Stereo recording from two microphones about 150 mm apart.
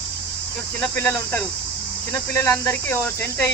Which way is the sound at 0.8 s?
15° left (ahead or behind).